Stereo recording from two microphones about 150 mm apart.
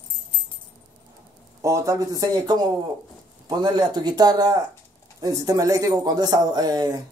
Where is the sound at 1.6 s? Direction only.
20° right (ahead or behind).